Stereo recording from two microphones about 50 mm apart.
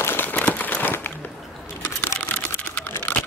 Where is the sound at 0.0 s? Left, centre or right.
Left.